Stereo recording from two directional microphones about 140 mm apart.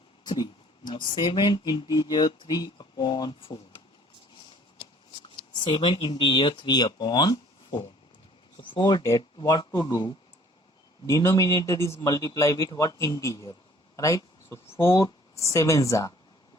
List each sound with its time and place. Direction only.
0.9 s speech: 30° left (ahead or behind)
5.5 s speech: 35° left (ahead or behind)
11.0 s speech: 20° left (ahead or behind)